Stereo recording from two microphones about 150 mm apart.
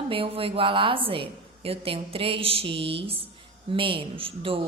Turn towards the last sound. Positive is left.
turn(degrees=-40)  # may be behind; listen again after turning